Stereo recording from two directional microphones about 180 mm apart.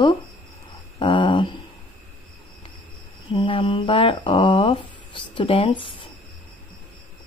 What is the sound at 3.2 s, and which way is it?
Speech, 30° left (ahead or behind).